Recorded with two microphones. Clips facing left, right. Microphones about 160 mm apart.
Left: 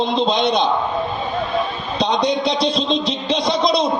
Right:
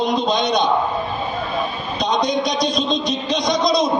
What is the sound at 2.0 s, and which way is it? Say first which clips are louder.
A man's voice: left 1 dB; 30° left (ahead or behind).